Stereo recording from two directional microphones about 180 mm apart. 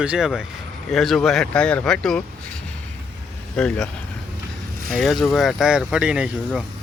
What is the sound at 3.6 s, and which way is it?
Speech, 5° left (ahead or behind).